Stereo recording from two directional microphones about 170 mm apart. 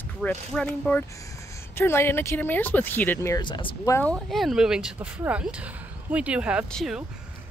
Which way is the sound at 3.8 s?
15° left (ahead or behind).